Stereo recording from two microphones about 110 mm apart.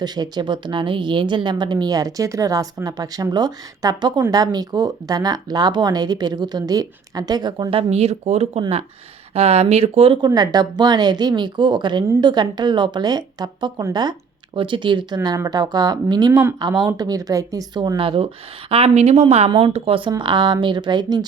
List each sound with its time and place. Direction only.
0.0 s a woman's voice: 40° right (ahead or behind)
7.7 s speech: 65° right (ahead or behind)
10.2 s a woman's voice: 40° right (ahead or behind)
16.3 s speech: 20° right (ahead or behind)
16.6 s a woman's voice: 40° right (ahead or behind)
17.9 s speech: 55° right (ahead or behind)
18.7 s speech: 70° right (ahead or behind)
19.5 s speech: 55° right (ahead or behind)
20.1 s speech: 45° right (ahead or behind)